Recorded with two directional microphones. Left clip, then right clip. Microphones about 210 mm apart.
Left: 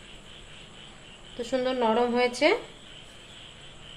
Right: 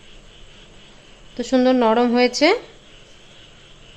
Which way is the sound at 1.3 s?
45° right (ahead or behind).